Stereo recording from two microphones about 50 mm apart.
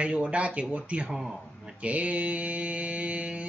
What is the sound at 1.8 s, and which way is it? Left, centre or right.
Mantra, right.